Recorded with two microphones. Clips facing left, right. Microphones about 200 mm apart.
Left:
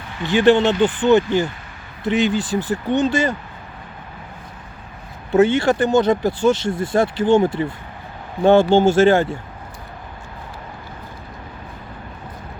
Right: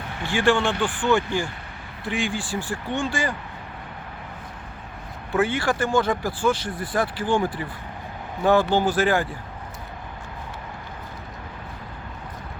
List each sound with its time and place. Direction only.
0.2 s speech: 20° left (ahead or behind)
5.3 s speech: 25° left (ahead or behind)
8.7 s speech: 25° left (ahead or behind)